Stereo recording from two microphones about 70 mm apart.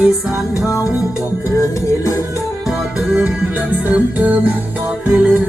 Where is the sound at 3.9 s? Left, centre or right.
Right.